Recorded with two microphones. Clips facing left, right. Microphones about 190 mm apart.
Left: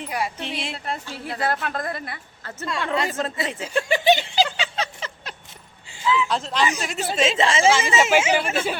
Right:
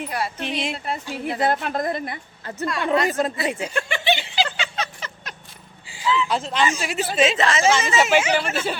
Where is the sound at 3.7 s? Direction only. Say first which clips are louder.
Left 5 dB; 40° left (ahead or behind).